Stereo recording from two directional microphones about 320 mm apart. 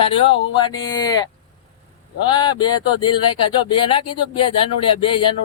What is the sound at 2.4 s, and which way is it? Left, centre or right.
Speech, centre.